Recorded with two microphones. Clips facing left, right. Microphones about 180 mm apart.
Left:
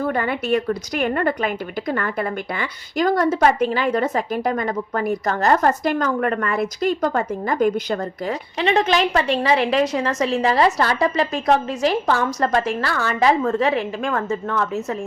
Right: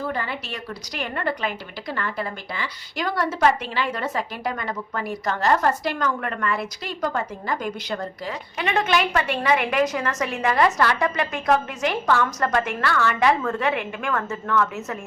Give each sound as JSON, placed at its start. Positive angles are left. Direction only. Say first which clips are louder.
{"t": 0.0, "sound": "a woman's voice", "louder": "left 6 dB", "side_deg": 55}
{"t": 8.5, "sound": "a woman's voice", "louder": "left 4 dB", "side_deg": 30}